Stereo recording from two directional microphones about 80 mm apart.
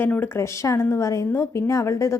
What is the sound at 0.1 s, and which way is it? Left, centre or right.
A woman's voice, left.